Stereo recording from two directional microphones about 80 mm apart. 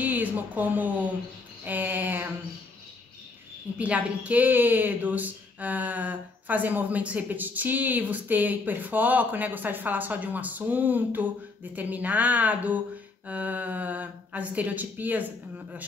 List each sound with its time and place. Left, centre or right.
0.0 s speech: right
3.7 s speech: centre